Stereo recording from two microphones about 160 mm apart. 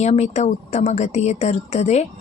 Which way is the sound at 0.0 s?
45° left (ahead or behind).